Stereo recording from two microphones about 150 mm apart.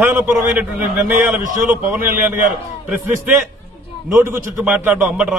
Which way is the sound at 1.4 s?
60° right (ahead or behind).